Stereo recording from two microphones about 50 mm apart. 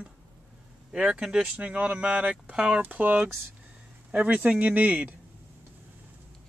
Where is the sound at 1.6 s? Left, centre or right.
Right.